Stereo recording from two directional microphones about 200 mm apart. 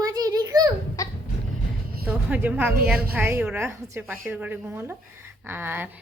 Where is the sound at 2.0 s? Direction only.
5° right (ahead or behind).